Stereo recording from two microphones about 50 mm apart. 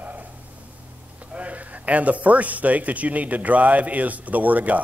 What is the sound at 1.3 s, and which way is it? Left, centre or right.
Speech, right.